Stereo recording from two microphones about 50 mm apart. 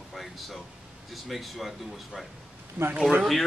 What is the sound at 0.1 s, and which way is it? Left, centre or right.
Air conditioning, centre.